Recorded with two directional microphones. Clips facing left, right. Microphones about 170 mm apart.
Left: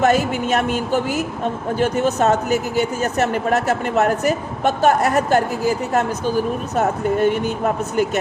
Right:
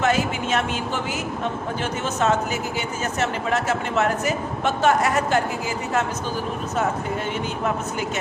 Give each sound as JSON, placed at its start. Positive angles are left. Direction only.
{"t": 0.0, "sound": "speech", "side_deg": 40}
{"t": 1.8, "sound": "speech", "side_deg": 40}
{"t": 6.7, "sound": "speech", "side_deg": 45}